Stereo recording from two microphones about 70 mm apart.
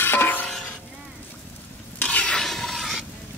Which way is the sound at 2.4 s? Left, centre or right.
Centre.